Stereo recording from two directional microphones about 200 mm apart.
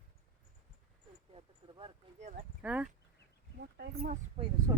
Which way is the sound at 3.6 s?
50° right (ahead or behind).